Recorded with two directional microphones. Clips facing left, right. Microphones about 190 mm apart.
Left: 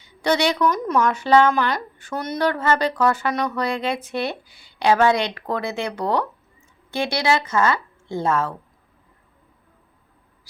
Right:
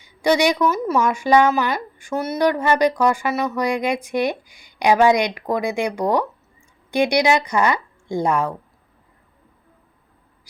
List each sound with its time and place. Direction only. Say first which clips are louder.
0.0 s speech: right 3 dB; 10° right (ahead or behind)